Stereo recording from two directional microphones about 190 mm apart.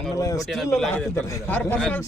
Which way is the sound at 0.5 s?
Centre (ahead or behind).